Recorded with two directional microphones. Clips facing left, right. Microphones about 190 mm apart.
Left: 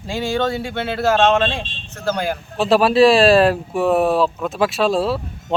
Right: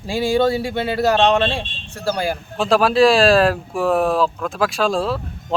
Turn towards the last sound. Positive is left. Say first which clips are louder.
# left 2 dB
turn(degrees=5)  # may be behind; listen again after turning